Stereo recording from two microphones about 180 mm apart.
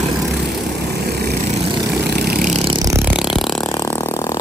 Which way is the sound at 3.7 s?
15° left (ahead or behind).